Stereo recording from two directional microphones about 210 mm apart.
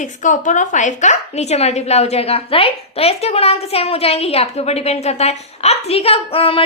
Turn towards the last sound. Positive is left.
turn(degrees=25)  # may be behind; listen again after turning